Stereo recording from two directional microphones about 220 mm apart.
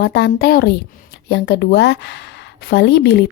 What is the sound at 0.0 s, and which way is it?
A woman's voice, 50° left (ahead or behind).